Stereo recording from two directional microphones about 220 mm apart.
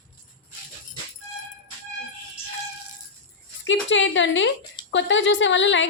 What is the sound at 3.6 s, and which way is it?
A woman's voice, 55° left (ahead or behind).